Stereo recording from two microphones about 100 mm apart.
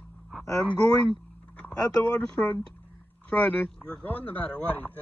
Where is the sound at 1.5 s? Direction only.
10° left (ahead or behind).